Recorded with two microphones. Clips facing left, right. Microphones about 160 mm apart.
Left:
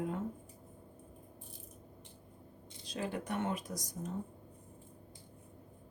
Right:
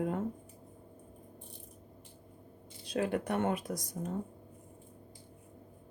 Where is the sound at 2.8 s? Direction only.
60° right (ahead or behind).